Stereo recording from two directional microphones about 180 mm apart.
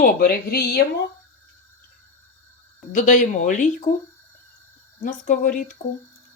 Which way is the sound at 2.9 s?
40° left (ahead or behind).